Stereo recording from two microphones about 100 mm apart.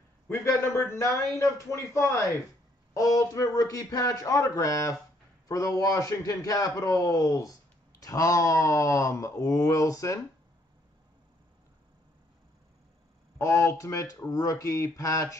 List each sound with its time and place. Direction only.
0.3 s a man's voice: 30° left (ahead or behind)
13.4 s speech: 30° left (ahead or behind)